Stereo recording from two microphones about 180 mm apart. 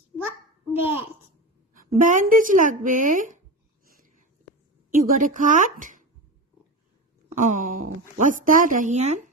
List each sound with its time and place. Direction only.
0.7 s a child's voice: 10° right (ahead or behind)
2.0 s speech: 45° right (ahead or behind)
4.9 s speech: 50° right (ahead or behind)
7.3 s speech: 45° right (ahead or behind)